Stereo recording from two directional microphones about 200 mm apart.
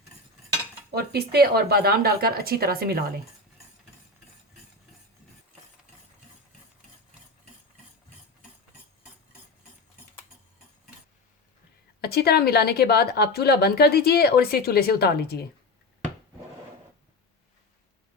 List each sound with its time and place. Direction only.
0.9 s speech: 50° right (ahead or behind)
11.9 s a woman's voice: 50° left (ahead or behind)